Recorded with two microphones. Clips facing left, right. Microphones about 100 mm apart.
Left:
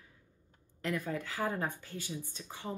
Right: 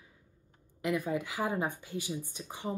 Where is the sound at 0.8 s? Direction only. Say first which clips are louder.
Right 4 dB; 15° right (ahead or behind).